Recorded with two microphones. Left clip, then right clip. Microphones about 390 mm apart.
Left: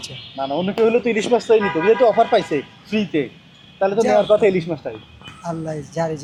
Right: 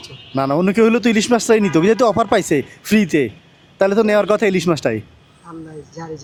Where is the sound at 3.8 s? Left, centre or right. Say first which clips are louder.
Right 2 dB; right.